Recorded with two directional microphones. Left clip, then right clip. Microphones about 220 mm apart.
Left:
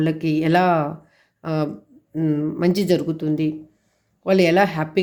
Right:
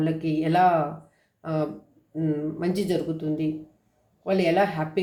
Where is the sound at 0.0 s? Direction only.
55° left (ahead or behind).